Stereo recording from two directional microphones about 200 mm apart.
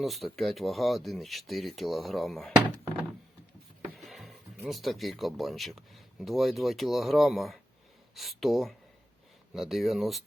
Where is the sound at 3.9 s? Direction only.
Centre (ahead or behind).